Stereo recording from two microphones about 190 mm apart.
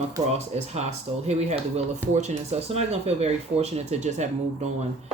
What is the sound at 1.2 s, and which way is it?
Chopping, 35° right (ahead or behind).